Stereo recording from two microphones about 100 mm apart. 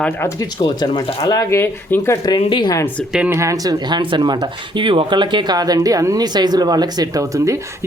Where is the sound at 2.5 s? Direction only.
50° left (ahead or behind).